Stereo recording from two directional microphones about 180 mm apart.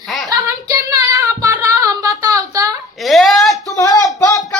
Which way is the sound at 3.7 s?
20° left (ahead or behind).